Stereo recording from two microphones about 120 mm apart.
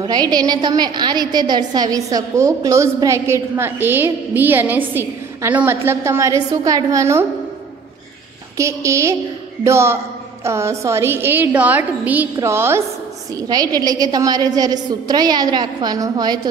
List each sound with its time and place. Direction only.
0.0 s a woman's voice: 35° right (ahead or behind)
8.5 s a woman's voice: 25° right (ahead or behind)
13.3 s a woman's voice: 30° right (ahead or behind)